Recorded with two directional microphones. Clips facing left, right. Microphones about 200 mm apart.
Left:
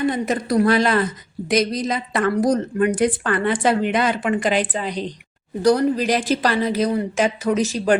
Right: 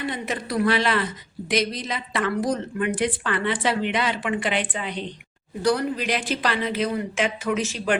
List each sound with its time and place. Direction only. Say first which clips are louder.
0.0 s a woman's voice: left 8 dB; 45° left (ahead or behind)